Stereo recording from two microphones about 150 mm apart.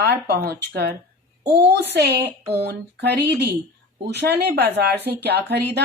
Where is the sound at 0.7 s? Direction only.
90° right.